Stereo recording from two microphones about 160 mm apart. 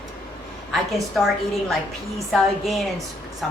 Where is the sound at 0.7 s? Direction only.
Centre (ahead or behind).